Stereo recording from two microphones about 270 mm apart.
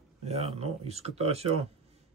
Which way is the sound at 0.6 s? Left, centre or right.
Right.